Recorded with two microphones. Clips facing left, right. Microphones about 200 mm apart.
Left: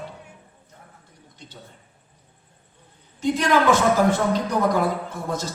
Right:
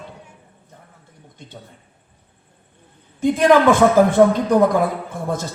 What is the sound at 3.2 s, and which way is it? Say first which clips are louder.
A man's voice: right 6 dB; 50° right (ahead or behind).